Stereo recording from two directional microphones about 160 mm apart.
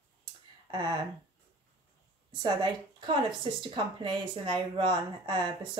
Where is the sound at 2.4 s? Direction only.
30° right (ahead or behind).